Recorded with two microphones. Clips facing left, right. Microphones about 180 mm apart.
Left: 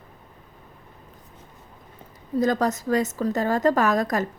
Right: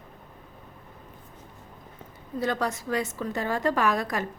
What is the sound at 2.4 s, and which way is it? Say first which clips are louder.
A woman's voice: left 6 dB; 40° left (ahead or behind).